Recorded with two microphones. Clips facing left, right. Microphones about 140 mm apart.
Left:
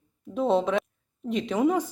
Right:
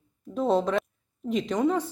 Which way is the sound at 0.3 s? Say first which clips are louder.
Left 1 dB; centre (ahead or behind).